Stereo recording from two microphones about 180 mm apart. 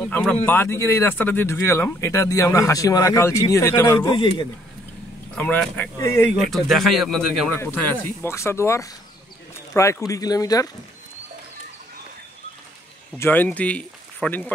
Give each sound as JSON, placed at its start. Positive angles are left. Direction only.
{"t": 0.2, "sound": "speech", "side_deg": 10}
{"t": 4.1, "sound": "speech", "side_deg": 25}
{"t": 5.3, "sound": "speech", "side_deg": 5}
{"t": 6.5, "sound": "speech", "side_deg": 0}
{"t": 7.5, "sound": "speech", "side_deg": 10}
{"t": 13.1, "sound": "speech", "side_deg": 10}